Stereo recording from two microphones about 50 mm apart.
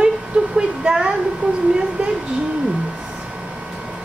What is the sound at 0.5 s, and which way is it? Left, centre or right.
Speech, centre.